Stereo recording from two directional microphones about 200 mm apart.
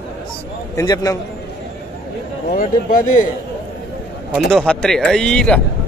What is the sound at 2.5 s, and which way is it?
Speech, 45° left (ahead or behind).